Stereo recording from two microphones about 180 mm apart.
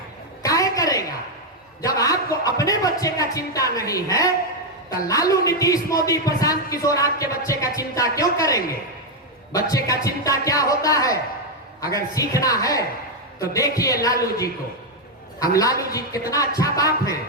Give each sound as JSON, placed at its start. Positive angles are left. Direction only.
{"t": 0.4, "sound": "a sound", "side_deg": 20}
{"t": 1.8, "sound": "a man's voice", "side_deg": 20}
{"t": 15.4, "sound": "a man's voice", "side_deg": 20}